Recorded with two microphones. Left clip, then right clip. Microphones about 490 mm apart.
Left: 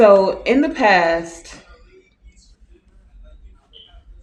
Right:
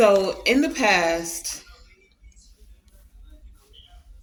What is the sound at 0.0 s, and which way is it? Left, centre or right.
Speech, right.